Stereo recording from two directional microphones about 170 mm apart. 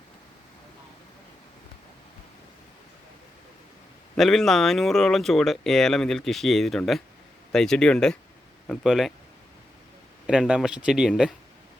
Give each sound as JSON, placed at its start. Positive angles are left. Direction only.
{"t": 4.1, "sound": "speech", "side_deg": 0}
{"t": 10.2, "sound": "speech", "side_deg": -5}